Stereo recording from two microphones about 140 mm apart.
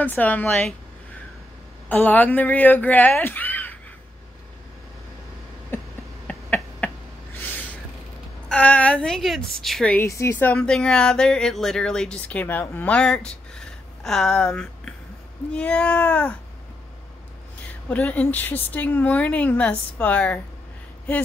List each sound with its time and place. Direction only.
0.0 s a woman's voice: 10° left (ahead or behind)
1.9 s speech: 10° left (ahead or behind)
5.7 s a sound: 15° left (ahead or behind)
8.5 s a woman's voice: 10° left (ahead or behind)
9.9 s a woman's voice: 20° left (ahead or behind)
17.8 s a woman's voice: 10° left (ahead or behind)